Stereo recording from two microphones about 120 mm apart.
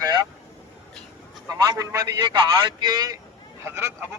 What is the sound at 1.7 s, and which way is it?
A man's voice, 25° right (ahead or behind).